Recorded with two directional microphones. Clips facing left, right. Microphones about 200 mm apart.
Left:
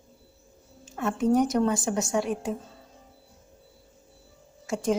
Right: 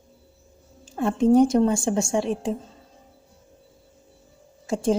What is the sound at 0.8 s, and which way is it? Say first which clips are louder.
A woman's voice: right 5 dB; 30° right (ahead or behind).